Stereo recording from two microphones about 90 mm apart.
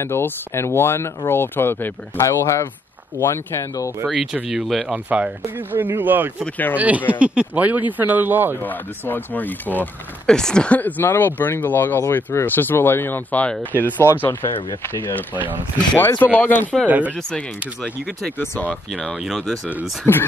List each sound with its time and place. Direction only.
0.0 s speech: 25° left (ahead or behind)
4.0 s speech: 10° right (ahead or behind)
4.9 s speech: 15° right (ahead or behind)
6.4 s speech: 20° left (ahead or behind)
7.1 s speech: 15° right (ahead or behind)
8.6 s speech: 20° left (ahead or behind)
10.2 s speech: 10° left (ahead or behind)
16.0 s speech: 25° left (ahead or behind)
16.8 s speech: 15° right (ahead or behind)
19.2 s speech: 5° right (ahead or behind)
19.8 s speech: 25° left (ahead or behind)